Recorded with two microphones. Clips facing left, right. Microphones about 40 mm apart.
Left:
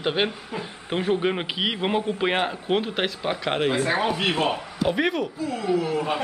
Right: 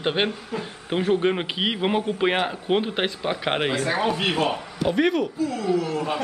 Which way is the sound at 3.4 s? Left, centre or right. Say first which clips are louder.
Even; right.